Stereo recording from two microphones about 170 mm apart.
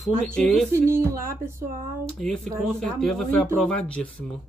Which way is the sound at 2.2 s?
5° left (ahead or behind).